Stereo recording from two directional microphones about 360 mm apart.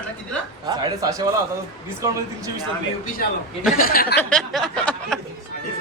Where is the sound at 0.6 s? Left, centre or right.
Centre.